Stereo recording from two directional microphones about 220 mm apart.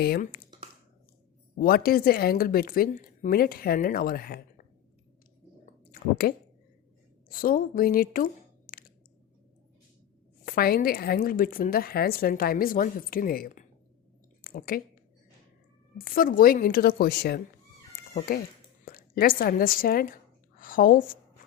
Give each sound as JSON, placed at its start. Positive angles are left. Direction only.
{"t": 0.0, "sound": "a woman's voice", "side_deg": 45}
{"t": 1.5, "sound": "a woman's voice", "side_deg": 40}
{"t": 5.9, "sound": "squish", "side_deg": 45}
{"t": 7.3, "sound": "speech", "side_deg": 40}
{"t": 10.4, "sound": "a woman's voice", "side_deg": 45}
{"t": 14.4, "sound": "a sound", "side_deg": 40}
{"t": 16.0, "sound": "a woman's voice", "side_deg": 40}
{"t": 18.1, "sound": "a woman's voice", "side_deg": 30}